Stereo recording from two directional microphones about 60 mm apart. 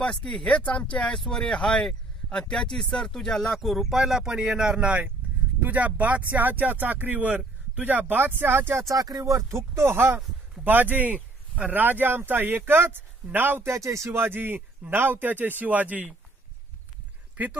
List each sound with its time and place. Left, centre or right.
0.3 s speech: centre; by 8.8 s right
8.8 s speech: right
10.6 s speech: right
13.7 s speech: right
14.1 s speech: right